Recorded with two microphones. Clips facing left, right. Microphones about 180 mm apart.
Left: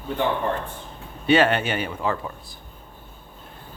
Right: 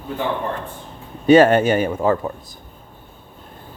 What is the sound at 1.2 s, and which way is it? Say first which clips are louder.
Speech: right 8 dB; 40° right (ahead or behind).